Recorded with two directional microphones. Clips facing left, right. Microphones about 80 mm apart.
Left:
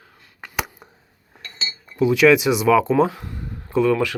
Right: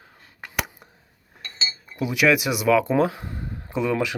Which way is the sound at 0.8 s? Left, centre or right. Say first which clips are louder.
Left 4 dB; centre.